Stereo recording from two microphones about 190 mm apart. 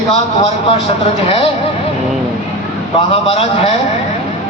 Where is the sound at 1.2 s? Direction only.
30° left (ahead or behind).